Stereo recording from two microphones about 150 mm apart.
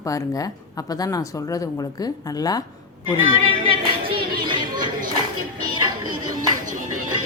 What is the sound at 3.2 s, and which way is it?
Music, 35° right (ahead or behind).